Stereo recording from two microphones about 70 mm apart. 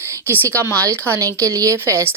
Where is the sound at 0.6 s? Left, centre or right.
Right.